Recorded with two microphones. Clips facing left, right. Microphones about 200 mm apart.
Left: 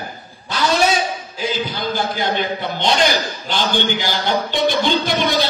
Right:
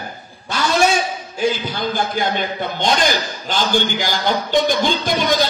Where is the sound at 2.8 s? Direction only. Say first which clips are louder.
Left 1 dB; 45° right (ahead or behind).